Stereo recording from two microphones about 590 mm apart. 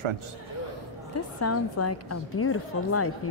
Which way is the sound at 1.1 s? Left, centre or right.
Left.